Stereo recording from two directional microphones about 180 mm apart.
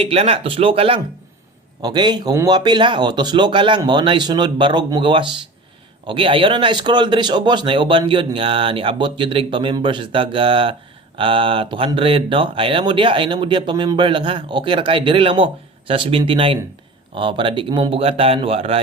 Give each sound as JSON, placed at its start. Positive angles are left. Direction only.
{"t": 0.0, "sound": "speech", "side_deg": -35}